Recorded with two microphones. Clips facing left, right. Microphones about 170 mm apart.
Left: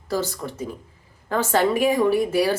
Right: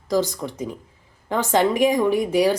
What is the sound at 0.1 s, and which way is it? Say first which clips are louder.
A woman's voice: right 4 dB; 15° right (ahead or behind).